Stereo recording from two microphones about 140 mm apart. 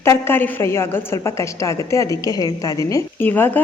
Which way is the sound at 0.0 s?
15° left (ahead or behind).